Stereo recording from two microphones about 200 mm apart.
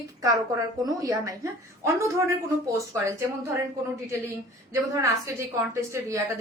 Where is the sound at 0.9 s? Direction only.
15° right (ahead or behind).